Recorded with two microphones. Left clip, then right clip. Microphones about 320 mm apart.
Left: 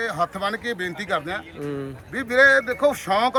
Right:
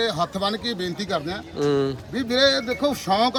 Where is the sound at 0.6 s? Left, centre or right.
Centre.